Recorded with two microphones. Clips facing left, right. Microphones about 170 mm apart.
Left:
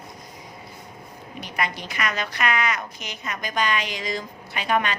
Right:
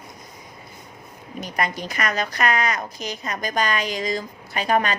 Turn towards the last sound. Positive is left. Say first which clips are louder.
# right 3 dB
turn(degrees=-40)  # may be behind; listen again after turning